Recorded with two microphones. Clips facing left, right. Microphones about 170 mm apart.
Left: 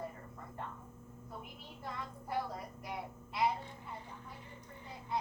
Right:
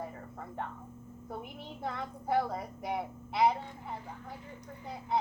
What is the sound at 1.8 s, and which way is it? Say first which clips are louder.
Speech: right 6 dB; 75° right (ahead or behind).